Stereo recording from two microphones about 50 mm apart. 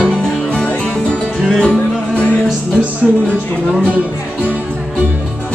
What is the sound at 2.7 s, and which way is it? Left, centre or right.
Music, right.